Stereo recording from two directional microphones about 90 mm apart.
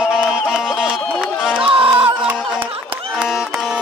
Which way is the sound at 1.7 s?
90° right.